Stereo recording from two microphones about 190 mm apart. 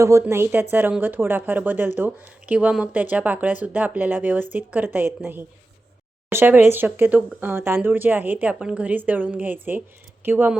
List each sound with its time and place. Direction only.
0.0 s speech: 15° right (ahead or behind)